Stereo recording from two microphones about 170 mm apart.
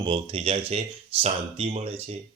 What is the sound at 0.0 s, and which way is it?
A man's voice, 30° right (ahead or behind).